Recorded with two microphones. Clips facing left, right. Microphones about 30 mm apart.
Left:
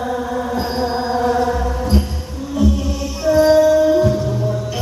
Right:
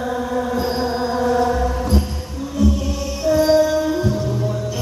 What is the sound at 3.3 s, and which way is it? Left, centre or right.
Music, centre.